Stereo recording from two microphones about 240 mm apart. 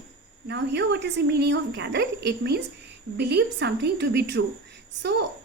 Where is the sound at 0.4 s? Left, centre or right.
Right.